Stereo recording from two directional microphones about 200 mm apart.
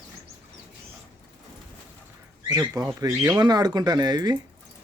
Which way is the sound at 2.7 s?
15° right (ahead or behind).